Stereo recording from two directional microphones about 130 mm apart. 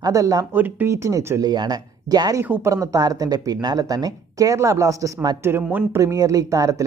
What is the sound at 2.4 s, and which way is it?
Speech, 20° right (ahead or behind).